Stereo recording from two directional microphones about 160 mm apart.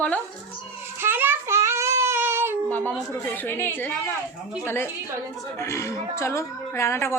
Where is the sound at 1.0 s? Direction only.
15° right (ahead or behind).